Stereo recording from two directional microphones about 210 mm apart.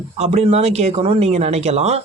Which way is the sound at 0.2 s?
30° right (ahead or behind).